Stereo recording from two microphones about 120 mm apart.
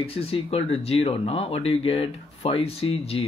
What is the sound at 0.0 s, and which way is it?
Speech, 50° left (ahead or behind).